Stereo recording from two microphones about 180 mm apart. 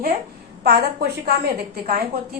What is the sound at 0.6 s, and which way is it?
A woman's voice, 60° right (ahead or behind).